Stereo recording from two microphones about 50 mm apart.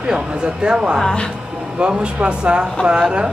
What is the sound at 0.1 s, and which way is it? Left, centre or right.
Speech, centre.